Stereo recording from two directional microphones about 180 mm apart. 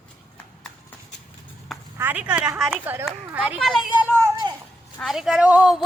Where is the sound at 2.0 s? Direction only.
10° right (ahead or behind).